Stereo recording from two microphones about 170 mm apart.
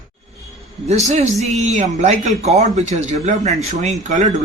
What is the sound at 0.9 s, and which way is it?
A man's voice, 40° right (ahead or behind).